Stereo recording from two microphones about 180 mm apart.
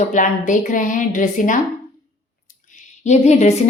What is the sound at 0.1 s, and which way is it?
A woman's voice, 45° left (ahead or behind).